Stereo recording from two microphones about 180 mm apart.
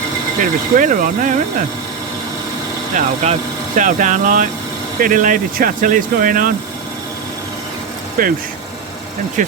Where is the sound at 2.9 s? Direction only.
45° right (ahead or behind).